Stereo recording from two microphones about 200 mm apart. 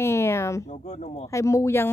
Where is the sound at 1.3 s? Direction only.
15° left (ahead or behind).